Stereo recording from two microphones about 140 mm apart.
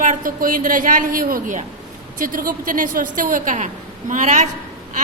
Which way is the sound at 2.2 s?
85° right.